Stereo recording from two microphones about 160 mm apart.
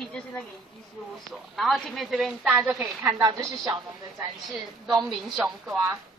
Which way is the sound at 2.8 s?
20° right (ahead or behind).